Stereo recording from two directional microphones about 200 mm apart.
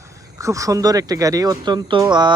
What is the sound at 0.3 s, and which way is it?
Speech, 15° right (ahead or behind).